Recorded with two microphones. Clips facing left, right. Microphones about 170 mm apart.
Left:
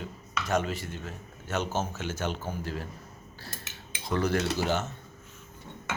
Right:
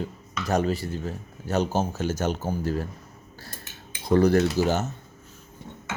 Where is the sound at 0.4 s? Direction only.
35° right (ahead or behind).